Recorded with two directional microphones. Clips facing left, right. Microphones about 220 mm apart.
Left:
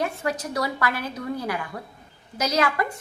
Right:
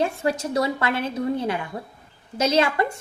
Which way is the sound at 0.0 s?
30° right (ahead or behind).